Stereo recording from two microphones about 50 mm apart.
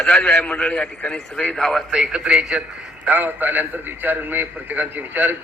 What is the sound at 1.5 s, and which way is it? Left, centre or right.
Speech, centre.